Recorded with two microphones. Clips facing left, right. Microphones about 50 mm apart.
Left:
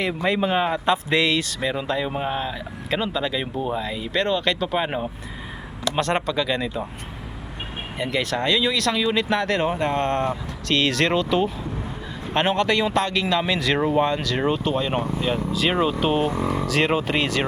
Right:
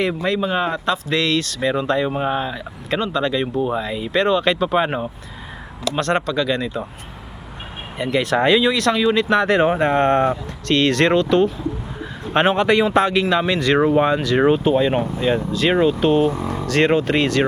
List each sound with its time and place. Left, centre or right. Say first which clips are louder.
0.0 s speech: right 4 dB; centre
0.3 s speech: left 3 dB; centre
1.6 s speech: right 8 dB; centre
6.0 s speech: right 3 dB; centre
7.9 s speech: right 5 dB; centre
8.4 s speech: right 7 dB; right
8.6 s speech: right 5 dB; centre
9.5 s speech: right 6 dB; centre
10.7 s speech: right 5 dB; centre
12.3 s speech: right 5 dB; centre
13.3 s speech: right 4 dB; centre